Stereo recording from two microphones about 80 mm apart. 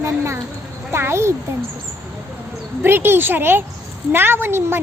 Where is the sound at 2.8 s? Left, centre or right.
Right.